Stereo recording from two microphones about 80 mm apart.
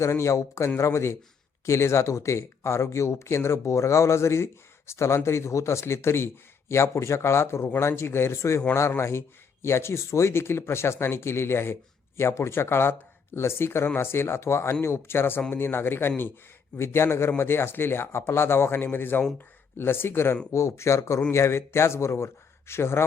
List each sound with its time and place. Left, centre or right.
0.0 s speech: left